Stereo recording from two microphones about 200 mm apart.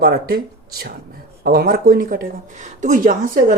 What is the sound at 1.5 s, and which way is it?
Speech, 50° right (ahead or behind).